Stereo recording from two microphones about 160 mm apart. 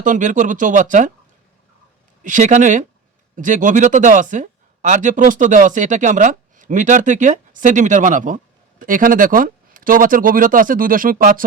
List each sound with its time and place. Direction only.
0.0 s speech: 50° right (ahead or behind)
2.2 s speech: 50° right (ahead or behind)